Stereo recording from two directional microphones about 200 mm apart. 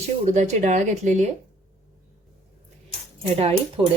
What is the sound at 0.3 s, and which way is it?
Speech, 35° right (ahead or behind).